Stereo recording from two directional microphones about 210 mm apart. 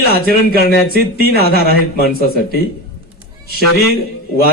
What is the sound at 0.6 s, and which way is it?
A man's voice, 50° left (ahead or behind).